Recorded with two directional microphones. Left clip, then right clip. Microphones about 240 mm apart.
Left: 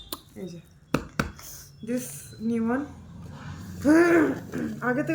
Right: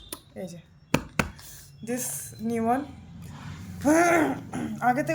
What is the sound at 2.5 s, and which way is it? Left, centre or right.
Speech, right.